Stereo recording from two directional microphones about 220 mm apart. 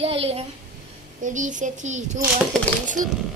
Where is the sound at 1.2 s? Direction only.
35° right (ahead or behind).